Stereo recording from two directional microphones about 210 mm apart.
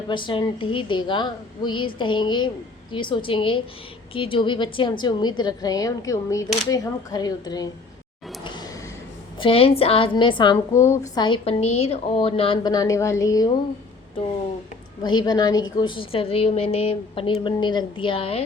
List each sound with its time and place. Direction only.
0.1 s a woman's voice: 20° left (ahead or behind)
8.4 s a sound: 20° left (ahead or behind)
9.4 s a woman's voice: 25° left (ahead or behind)
15.0 s a woman's voice: 20° left (ahead or behind)